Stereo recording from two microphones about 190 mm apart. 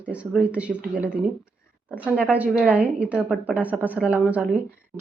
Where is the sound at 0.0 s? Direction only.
5° right (ahead or behind).